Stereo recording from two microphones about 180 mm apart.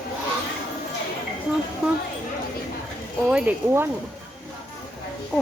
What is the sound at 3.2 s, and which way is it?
Speech, 5° right (ahead or behind).